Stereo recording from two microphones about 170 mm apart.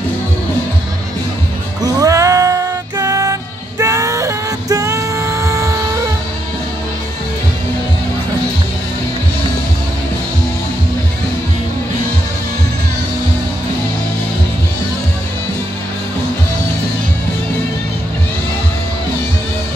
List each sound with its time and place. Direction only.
1.8 s music: 20° right (ahead or behind)